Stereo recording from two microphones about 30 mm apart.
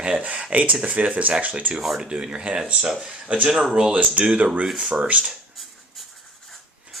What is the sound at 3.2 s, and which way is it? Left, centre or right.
Speech, right.